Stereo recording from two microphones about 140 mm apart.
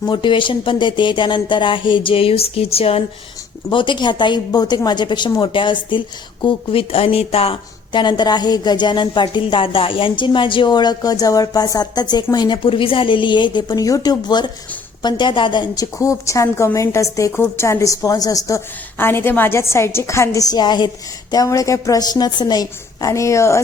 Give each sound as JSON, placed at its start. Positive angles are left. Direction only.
{"t": 0.0, "sound": "a woman's voice", "side_deg": 35}